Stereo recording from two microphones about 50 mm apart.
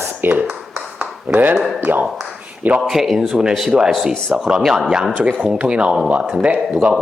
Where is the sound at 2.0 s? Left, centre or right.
Centre.